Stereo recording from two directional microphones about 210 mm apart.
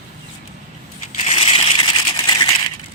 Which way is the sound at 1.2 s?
30° left (ahead or behind).